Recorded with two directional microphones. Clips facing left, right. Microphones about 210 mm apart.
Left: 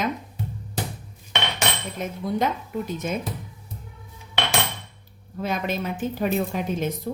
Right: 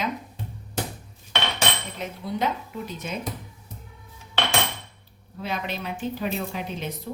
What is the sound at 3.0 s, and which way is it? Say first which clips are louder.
Speech: left 4 dB; 45° left (ahead or behind).